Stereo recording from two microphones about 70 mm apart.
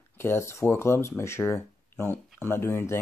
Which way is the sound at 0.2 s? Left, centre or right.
Left.